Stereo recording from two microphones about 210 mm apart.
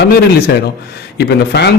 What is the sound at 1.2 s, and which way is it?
Speech, 50° left (ahead or behind).